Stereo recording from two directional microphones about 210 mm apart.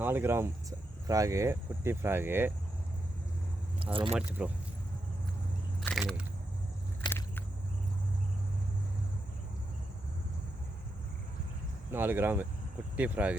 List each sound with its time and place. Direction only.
0.0 s speech: 10° right (ahead or behind)
3.9 s speech: 25° right (ahead or behind)
4.3 s speech: 10° right (ahead or behind)
5.8 s a sound: centre (ahead or behind)
7.0 s a sound: 20° left (ahead or behind)
11.9 s speech: 10° right (ahead or behind)